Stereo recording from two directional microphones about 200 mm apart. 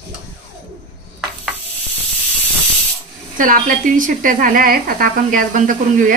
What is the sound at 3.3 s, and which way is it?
A woman's voice, 45° right (ahead or behind).